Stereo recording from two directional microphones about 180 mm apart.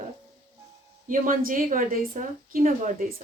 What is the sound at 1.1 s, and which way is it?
A woman's voice, 50° right (ahead or behind).